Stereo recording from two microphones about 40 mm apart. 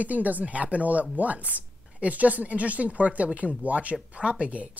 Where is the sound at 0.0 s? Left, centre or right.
Right.